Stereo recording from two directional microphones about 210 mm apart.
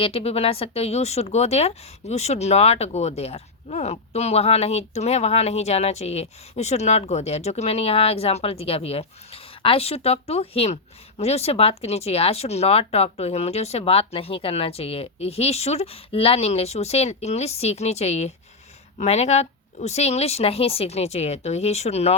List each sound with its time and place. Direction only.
0.0 s speech: 30° left (ahead or behind)